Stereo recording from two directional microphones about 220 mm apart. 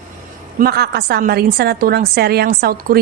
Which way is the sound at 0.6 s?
45° right (ahead or behind).